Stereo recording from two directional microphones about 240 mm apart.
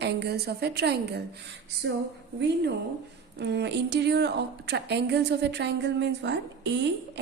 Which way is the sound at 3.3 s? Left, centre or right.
Right.